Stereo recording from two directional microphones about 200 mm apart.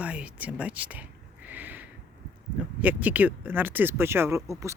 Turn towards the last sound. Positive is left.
turn(degrees=-15)  # may be behind; listen again after turning